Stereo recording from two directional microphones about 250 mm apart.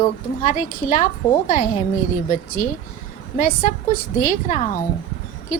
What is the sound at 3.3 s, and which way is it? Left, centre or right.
A woman's voice, left.